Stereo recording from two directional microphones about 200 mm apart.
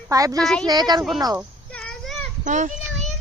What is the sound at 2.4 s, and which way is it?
Speech, 40° right (ahead or behind).